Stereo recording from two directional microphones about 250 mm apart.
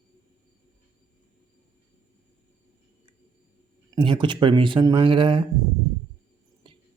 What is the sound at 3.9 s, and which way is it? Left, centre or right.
Speech, centre.